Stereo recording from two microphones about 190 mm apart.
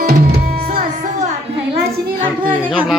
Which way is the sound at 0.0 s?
55° right (ahead or behind).